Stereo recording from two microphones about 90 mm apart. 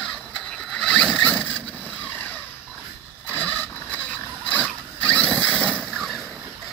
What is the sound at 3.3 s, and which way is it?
Vehicle, 20° left (ahead or behind).